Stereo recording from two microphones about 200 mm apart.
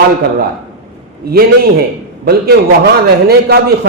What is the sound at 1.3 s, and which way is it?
A man's voice, 50° right (ahead or behind).